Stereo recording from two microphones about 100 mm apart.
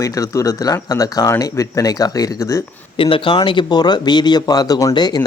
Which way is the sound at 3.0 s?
60° left (ahead or behind).